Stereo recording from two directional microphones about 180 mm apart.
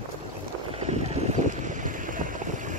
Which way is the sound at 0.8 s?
40° right (ahead or behind).